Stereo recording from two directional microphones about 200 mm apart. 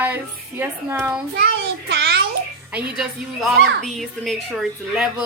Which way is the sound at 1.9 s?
55° right (ahead or behind).